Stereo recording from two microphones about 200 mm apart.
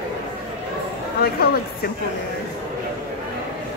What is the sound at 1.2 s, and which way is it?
Speech, 50° left (ahead or behind).